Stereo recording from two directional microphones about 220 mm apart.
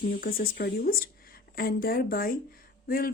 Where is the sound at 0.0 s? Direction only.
40° left (ahead or behind).